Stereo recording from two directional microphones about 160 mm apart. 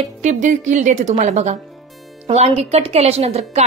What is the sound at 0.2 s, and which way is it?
A woman's voice, 50° right (ahead or behind).